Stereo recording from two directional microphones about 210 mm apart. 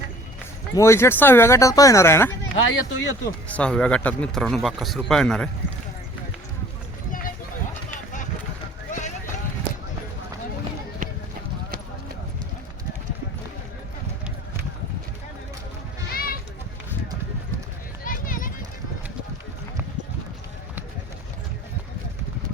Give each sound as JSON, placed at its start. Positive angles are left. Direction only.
{"t": 0.7, "sound": "speech", "side_deg": 15}
{"t": 2.6, "sound": "speech", "side_deg": 65}
{"t": 3.5, "sound": "speech", "side_deg": 5}
{"t": 7.1, "sound": "run", "side_deg": 40}
{"t": 8.9, "sound": "clip-clop", "side_deg": 35}
{"t": 16.1, "sound": "children playing", "side_deg": 45}
{"t": 18.0, "sound": "a sound", "side_deg": 40}